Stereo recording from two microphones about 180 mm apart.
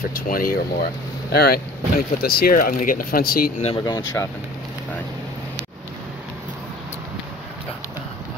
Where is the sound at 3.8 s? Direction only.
20° left (ahead or behind).